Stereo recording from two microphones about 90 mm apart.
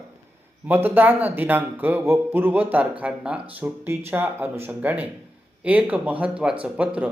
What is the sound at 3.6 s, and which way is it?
A man's voice, 25° right (ahead or behind).